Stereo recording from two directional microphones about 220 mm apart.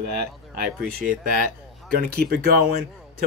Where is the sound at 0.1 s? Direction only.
45° right (ahead or behind).